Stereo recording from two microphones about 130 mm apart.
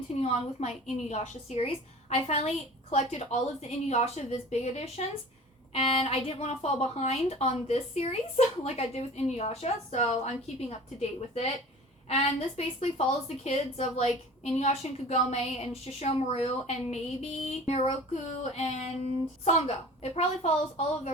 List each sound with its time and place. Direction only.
0.2 s speech: 55° left (ahead or behind)
5.7 s speech: 50° left (ahead or behind)
12.0 s a child's voice: 55° left (ahead or behind)